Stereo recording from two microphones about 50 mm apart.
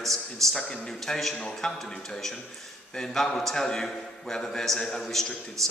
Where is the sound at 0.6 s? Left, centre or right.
Centre.